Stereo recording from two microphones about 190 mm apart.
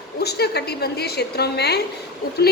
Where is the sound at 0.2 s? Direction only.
60° left (ahead or behind).